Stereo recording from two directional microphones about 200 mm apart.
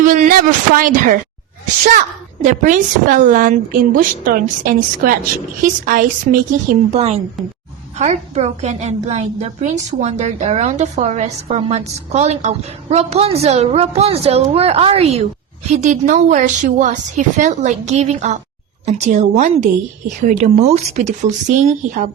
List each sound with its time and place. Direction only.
0.0 s a woman's voice: 40° right (ahead or behind)
2.4 s a woman's voice: 40° right (ahead or behind)